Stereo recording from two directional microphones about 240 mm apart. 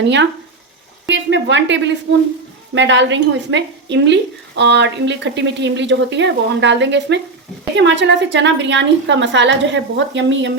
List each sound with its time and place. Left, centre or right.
0.0 s a woman's voice: right